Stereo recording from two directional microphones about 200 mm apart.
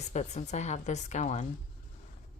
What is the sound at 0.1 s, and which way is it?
Speech, 35° left (ahead or behind).